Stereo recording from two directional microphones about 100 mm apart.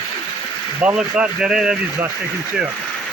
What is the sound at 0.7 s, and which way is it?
Speech, 10° right (ahead or behind).